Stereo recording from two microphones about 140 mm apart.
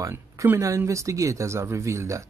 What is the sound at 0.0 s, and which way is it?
Speech, 20° right (ahead or behind).